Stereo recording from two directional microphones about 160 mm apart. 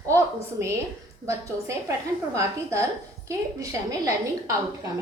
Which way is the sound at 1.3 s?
20° right (ahead or behind).